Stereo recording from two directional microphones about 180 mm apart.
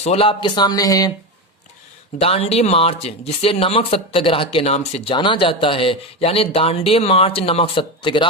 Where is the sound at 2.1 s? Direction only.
35° left (ahead or behind).